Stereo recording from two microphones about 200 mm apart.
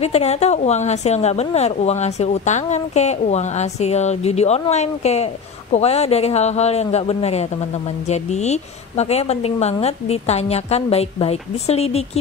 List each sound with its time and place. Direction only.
0.0 s a woman's voice: 35° left (ahead or behind)